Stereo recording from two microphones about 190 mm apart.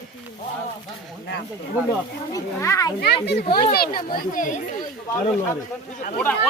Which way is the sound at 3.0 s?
60° left (ahead or behind).